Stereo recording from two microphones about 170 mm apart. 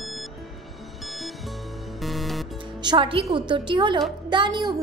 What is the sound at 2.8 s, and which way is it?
Speech, 30° right (ahead or behind).